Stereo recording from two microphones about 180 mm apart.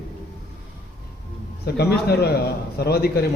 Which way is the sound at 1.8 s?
65° left (ahead or behind).